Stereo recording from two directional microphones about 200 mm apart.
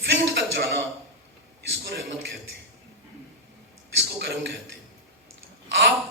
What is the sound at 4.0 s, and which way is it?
Speech, 55° right (ahead or behind).